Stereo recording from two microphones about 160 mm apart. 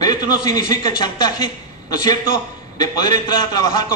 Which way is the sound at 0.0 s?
25° left (ahead or behind).